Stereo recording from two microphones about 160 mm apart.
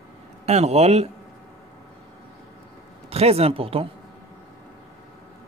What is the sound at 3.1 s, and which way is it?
Speech, 40° right (ahead or behind).